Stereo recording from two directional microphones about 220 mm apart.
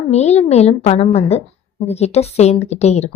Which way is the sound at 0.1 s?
30° left (ahead or behind).